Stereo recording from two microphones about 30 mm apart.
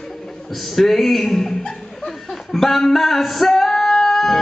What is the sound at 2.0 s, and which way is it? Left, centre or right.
Speech, centre.